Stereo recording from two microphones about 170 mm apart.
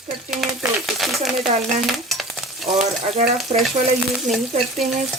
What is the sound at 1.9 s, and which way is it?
Stir, centre (ahead or behind).